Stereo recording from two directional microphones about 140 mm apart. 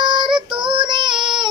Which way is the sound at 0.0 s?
35° right (ahead or behind).